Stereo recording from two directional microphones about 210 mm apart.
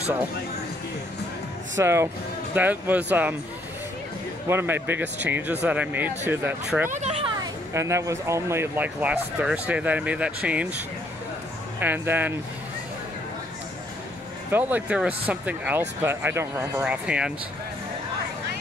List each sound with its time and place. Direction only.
1.8 s speech: 10° right (ahead or behind)
4.5 s speech: 10° right (ahead or behind)
6.9 s speech: 30° right (ahead or behind)
7.7 s speech: 15° right (ahead or behind)
11.8 s speech: 10° right (ahead or behind)
14.5 s speech: 10° right (ahead or behind)